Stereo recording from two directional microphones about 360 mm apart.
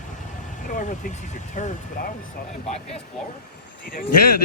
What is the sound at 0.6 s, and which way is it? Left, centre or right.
Speech, left.